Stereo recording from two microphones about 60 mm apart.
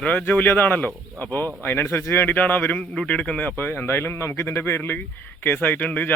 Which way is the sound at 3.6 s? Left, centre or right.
Left.